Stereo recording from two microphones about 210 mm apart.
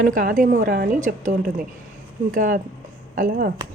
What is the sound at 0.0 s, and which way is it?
A woman's voice, 40° right (ahead or behind).